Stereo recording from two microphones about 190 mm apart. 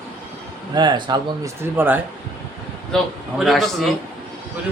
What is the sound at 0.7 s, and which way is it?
Speech, 20° right (ahead or behind).